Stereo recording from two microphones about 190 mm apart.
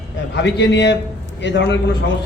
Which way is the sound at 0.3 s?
65° left (ahead or behind).